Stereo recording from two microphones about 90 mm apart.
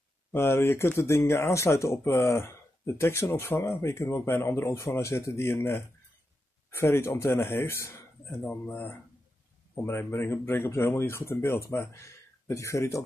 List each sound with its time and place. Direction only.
0.3 s speech: 25° left (ahead or behind)